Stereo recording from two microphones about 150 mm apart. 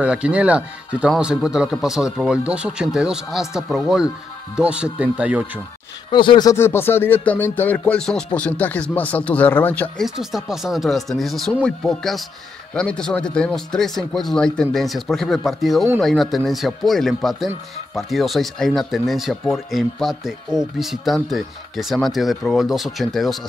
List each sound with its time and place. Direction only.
0.0 s speech: 10° right (ahead or behind)
6.1 s speech: 30° left (ahead or behind)
6.5 s speech: 15° left (ahead or behind)
10.0 s speech: centre (ahead or behind)